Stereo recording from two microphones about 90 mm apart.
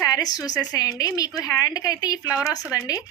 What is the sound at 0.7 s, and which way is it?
A woman's voice, 45° left (ahead or behind).